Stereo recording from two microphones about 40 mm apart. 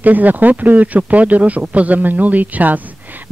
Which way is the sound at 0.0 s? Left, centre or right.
Right.